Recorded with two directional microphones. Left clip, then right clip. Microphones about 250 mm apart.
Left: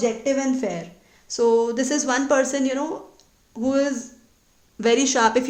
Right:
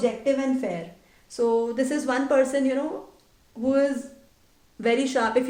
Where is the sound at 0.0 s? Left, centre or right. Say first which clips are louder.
Left 2 dB; left.